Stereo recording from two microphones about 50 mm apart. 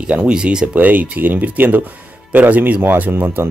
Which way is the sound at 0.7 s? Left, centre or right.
Right.